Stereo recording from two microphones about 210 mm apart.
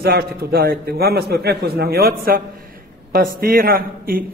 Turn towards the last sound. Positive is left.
turn(degrees=-45)  # may be behind; listen again after turning